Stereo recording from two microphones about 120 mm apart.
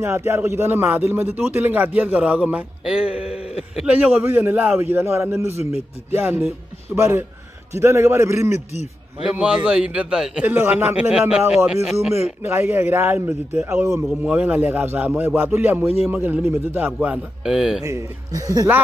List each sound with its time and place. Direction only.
0.0 s a man's voice: 20° right (ahead or behind)
9.3 s a man's voice: 10° right (ahead or behind)
10.5 s a man's voice: 20° right (ahead or behind)
11.1 s speech: 5° right (ahead or behind)
12.4 s a man's voice: 20° right (ahead or behind)
13.7 s a man's voice: 20° right (ahead or behind)
14.0 s a man's voice: 10° right (ahead or behind)
17.8 s a man's voice: 25° right (ahead or behind)